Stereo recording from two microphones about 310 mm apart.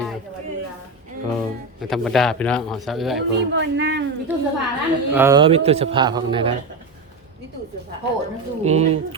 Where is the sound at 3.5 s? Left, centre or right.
Right.